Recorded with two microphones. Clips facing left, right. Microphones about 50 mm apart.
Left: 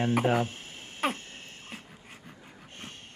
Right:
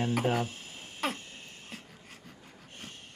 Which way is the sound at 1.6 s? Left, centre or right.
Left.